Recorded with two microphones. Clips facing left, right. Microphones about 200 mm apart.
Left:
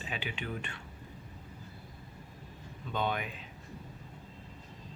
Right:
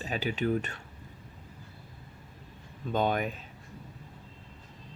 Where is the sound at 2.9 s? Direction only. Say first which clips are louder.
Right 6 dB; 45° right (ahead or behind).